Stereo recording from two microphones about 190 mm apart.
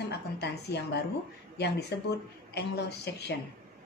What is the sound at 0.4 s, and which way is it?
Speech, 60° left (ahead or behind).